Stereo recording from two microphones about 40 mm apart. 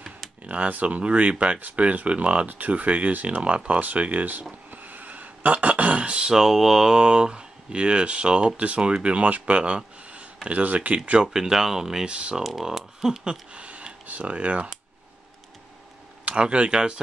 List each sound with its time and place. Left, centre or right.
0.5 s speech: right
4.6 s a sound: right
6.2 s speech: centre
7.0 s speech: right
10.0 s a sound: right
10.6 s speech: right
11.2 s speech: centre
12.1 s speech: right
12.4 s speech: centre
13.2 s a sound: right
14.0 s speech: right
16.3 s speech: right